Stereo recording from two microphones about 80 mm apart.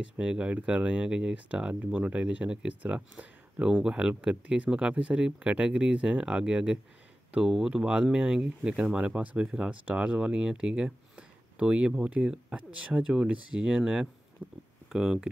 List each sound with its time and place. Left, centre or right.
0.2 s speech: centre
14.4 s speech: right
14.9 s speech: centre